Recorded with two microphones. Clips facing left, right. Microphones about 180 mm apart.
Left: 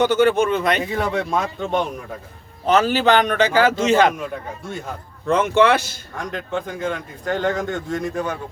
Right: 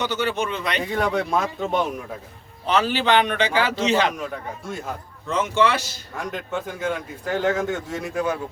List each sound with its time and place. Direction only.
0.0 s a man's voice: 50° left (ahead or behind)
0.8 s speech: centre (ahead or behind)
2.6 s a man's voice: 45° left (ahead or behind)
5.3 s speech: 60° left (ahead or behind)
6.1 s speech: 5° right (ahead or behind)